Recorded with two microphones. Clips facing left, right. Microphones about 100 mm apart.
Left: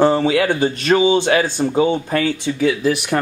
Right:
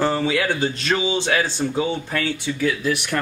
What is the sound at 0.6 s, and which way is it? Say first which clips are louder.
Speech: left 7 dB; 50° left (ahead or behind).